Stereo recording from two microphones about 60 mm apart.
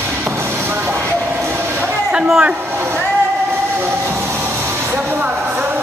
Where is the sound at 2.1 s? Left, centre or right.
Centre.